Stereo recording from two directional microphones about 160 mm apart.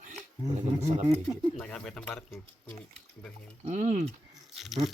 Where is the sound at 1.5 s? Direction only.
5° left (ahead or behind).